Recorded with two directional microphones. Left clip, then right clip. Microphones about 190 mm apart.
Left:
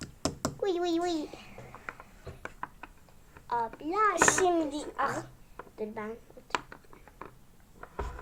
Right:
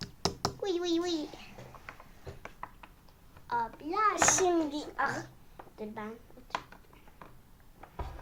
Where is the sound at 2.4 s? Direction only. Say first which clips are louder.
Left 6 dB; 60° left (ahead or behind).